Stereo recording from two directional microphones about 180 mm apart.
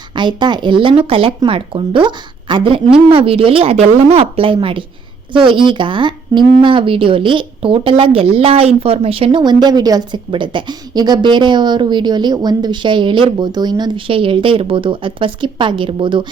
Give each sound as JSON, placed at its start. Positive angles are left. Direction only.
{"t": 0.2, "sound": "a woman's voice", "side_deg": -25}